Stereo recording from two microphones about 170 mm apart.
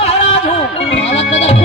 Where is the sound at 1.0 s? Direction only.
40° left (ahead or behind).